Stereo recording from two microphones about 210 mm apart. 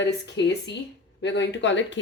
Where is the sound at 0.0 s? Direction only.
55° left (ahead or behind).